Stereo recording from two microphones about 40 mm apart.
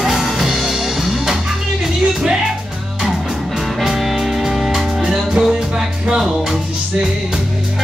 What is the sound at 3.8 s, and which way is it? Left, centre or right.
Music, centre.